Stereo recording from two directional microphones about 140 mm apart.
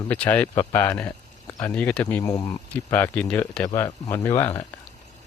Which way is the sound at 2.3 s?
25° left (ahead or behind).